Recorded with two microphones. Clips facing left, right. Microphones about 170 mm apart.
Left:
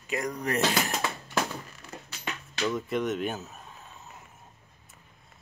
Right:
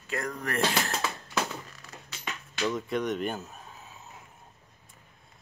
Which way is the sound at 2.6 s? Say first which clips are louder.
Left 1 dB; centre (ahead or behind).